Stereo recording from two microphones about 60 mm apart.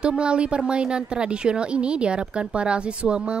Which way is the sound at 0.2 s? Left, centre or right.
Centre.